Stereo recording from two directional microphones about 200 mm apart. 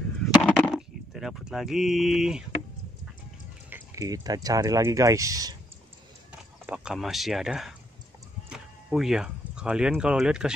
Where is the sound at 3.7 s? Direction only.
15° right (ahead or behind).